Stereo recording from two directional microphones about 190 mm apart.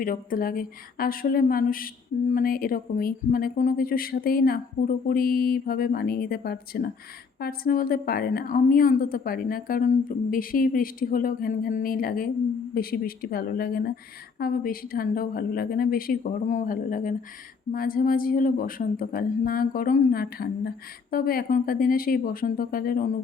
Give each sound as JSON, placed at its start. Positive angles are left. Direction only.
{"t": 0.0, "sound": "speech", "side_deg": 50}